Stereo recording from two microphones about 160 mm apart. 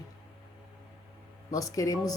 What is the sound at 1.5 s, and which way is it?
Speech, 20° left (ahead or behind).